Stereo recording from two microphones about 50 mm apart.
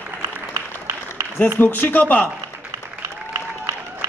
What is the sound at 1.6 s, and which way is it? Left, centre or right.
Speech, left.